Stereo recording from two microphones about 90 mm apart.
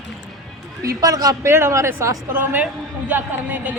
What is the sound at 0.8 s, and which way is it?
Speech, 40° right (ahead or behind).